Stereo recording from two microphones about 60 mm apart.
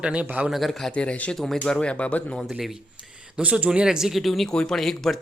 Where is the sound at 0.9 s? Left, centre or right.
Left.